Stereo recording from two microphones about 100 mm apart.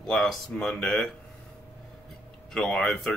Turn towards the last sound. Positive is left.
turn(degrees=10)  # may be behind; listen again after turning